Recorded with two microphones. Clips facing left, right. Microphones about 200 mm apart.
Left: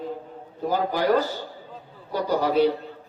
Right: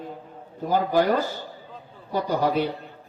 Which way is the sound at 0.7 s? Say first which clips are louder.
Right 4 dB; 50° right (ahead or behind).